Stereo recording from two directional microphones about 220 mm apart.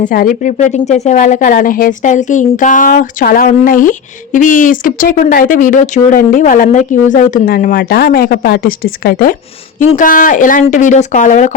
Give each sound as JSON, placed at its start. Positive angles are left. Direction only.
{"t": 0.0, "sound": "a woman's voice", "side_deg": 40}